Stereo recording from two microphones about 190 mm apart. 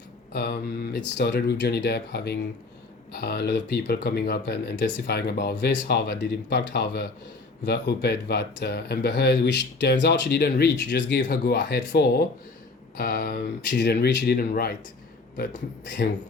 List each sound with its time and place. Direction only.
0.3 s speech: 60° left (ahead or behind)